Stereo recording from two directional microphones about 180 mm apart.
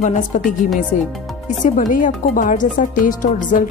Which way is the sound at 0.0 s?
45° left (ahead or behind).